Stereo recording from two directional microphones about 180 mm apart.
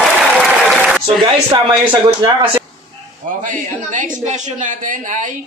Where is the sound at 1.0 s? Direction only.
25° right (ahead or behind).